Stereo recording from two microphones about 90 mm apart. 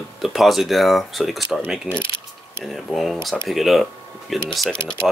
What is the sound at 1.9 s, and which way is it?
Mechanisms, 10° right (ahead or behind).